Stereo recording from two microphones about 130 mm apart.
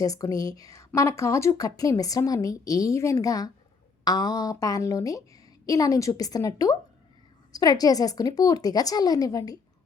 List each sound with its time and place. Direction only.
0.0 s a woman's voice: 25° left (ahead or behind)